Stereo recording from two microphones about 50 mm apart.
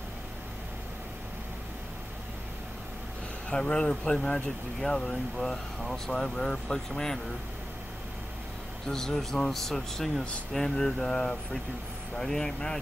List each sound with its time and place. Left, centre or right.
3.4 s speech: centre
8.8 s speech: centre